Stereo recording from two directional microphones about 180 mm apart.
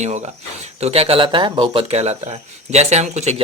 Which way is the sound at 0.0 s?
40° right (ahead or behind).